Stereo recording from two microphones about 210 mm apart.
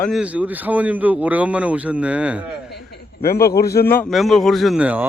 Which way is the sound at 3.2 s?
45° left (ahead or behind).